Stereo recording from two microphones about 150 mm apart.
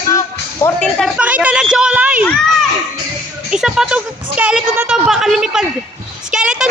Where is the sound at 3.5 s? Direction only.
5° right (ahead or behind).